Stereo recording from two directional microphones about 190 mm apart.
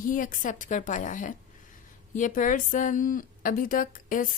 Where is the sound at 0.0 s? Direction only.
45° left (ahead or behind).